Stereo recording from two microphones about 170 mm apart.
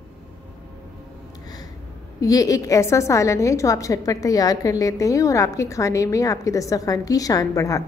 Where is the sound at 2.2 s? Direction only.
20° left (ahead or behind).